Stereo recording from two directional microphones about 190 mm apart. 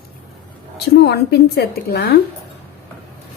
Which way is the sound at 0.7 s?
60° left (ahead or behind).